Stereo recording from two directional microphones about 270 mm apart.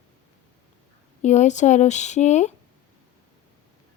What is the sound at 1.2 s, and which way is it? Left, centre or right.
A woman's voice, left.